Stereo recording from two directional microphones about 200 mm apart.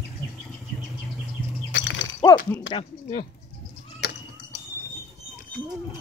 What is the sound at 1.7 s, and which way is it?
Breaking, 65° left (ahead or behind).